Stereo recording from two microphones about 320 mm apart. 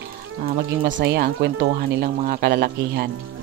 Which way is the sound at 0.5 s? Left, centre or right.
Right.